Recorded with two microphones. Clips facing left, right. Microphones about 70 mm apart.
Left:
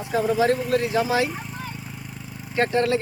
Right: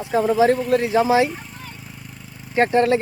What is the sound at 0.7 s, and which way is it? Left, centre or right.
Speech, right.